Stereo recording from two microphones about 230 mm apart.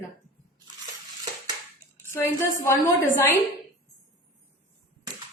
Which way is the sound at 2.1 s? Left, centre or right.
Centre.